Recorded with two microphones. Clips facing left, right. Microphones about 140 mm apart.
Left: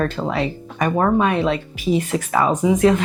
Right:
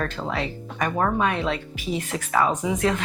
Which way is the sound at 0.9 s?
30° left (ahead or behind).